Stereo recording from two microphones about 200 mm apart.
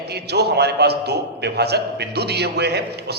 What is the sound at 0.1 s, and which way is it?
A man's voice, 55° right (ahead or behind).